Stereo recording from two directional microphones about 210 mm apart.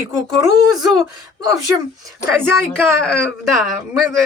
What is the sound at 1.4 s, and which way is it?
Speech, 15° right (ahead or behind).